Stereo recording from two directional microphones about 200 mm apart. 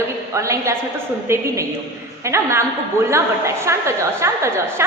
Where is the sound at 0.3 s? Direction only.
15° right (ahead or behind).